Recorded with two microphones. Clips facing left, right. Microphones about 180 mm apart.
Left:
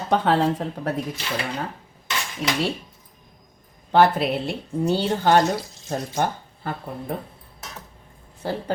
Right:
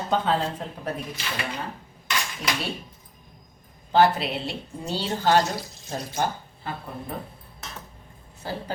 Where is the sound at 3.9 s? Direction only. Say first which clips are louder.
Left 2 dB; 55° left (ahead or behind).